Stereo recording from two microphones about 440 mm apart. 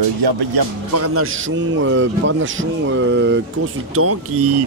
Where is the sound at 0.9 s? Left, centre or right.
Right.